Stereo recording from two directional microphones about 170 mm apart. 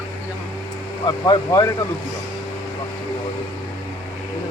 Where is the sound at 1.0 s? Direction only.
25° left (ahead or behind).